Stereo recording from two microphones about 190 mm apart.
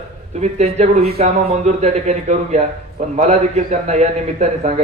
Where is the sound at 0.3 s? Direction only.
35° right (ahead or behind).